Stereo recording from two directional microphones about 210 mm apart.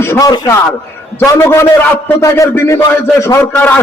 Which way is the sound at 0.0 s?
15° left (ahead or behind).